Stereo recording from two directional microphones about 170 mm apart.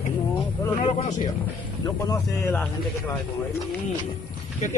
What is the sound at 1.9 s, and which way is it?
Speech, 20° left (ahead or behind).